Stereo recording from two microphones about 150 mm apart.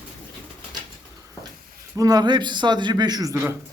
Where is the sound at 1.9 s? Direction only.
25° right (ahead or behind).